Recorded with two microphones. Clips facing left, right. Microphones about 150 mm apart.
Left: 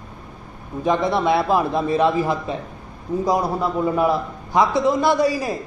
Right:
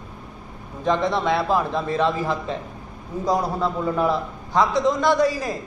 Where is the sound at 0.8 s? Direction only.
10° left (ahead or behind).